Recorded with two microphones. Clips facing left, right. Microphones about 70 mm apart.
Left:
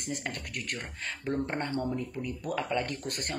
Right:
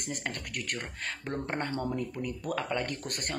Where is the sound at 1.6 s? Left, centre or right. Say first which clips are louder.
Left 1 dB; right.